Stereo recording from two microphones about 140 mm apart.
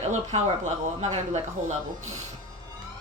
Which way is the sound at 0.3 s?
55° right (ahead or behind).